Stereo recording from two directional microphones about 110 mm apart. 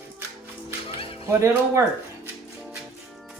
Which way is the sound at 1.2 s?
25° right (ahead or behind).